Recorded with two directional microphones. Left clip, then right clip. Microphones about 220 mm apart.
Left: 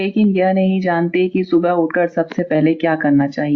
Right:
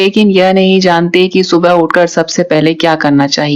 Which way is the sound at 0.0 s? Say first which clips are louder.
Right 8 dB; 45° right (ahead or behind).